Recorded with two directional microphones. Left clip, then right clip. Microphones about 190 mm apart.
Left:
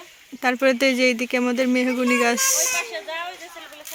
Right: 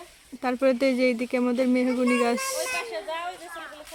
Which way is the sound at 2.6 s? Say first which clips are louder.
Left 4 dB; 20° right (ahead or behind).